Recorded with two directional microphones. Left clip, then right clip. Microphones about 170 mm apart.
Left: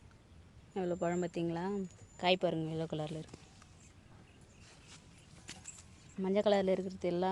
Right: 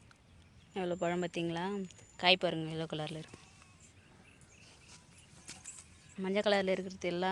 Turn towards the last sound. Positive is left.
turn(degrees=10)  # may be behind; listen again after turning